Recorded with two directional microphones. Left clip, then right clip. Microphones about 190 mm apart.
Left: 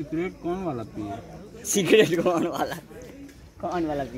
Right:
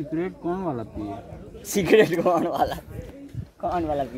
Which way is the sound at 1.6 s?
10° right (ahead or behind).